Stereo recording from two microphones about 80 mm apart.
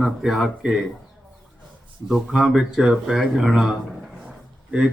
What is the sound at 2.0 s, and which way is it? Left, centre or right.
Speech, centre.